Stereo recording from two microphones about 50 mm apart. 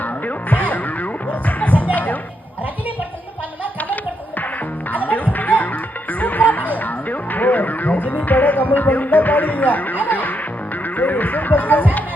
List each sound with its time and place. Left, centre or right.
0.0 s music: left
1.9 s a sound: left
3.8 s music: left
10.8 s speech: left